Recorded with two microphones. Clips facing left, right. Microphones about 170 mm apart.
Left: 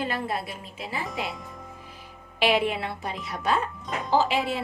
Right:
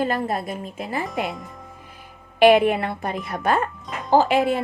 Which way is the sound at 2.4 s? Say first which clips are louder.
Right 9 dB; 55° right (ahead or behind).